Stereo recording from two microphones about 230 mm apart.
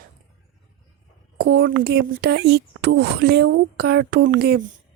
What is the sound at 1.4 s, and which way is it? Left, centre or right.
Speech, right.